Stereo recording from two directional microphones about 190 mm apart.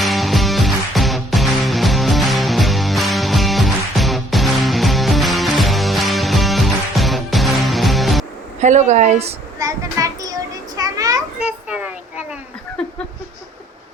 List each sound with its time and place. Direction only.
0.0 s music: centre (ahead or behind)
8.6 s speech: 40° right (ahead or behind)
9.6 s child singing: 15° right (ahead or behind)
10.8 s children playing: 20° right (ahead or behind)
11.3 s children playing: 5° right (ahead or behind)